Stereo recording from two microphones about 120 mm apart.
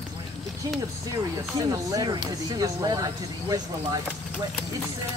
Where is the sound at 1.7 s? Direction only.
35° right (ahead or behind).